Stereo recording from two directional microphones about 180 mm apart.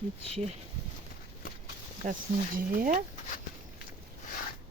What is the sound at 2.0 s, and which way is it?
Speech, 45° right (ahead or behind).